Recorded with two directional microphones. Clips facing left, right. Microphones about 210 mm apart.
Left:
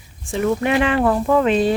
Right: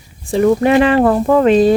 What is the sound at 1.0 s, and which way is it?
Speech, 45° right (ahead or behind).